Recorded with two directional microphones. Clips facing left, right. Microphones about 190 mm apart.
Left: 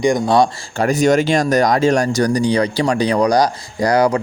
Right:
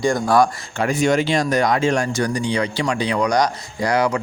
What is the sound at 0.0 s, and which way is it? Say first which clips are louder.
Speech: left 3 dB; 20° left (ahead or behind).